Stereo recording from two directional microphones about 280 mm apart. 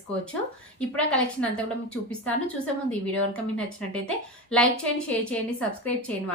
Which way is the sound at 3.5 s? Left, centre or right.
Centre.